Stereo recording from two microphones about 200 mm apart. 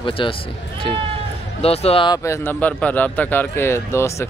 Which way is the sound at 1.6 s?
30° left (ahead or behind).